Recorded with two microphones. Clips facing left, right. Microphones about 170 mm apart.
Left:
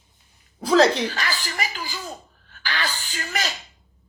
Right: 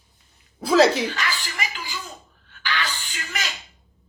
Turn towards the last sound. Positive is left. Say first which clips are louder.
# left 4 dB
turn(degrees=35)  # may be behind; listen again after turning